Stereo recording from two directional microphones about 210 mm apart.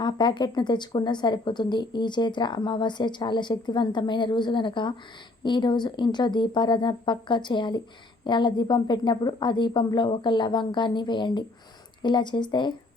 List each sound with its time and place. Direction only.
0.0 s speech: 20° left (ahead or behind)